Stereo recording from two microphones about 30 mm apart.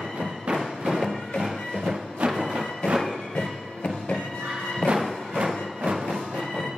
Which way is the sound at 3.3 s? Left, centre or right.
Left.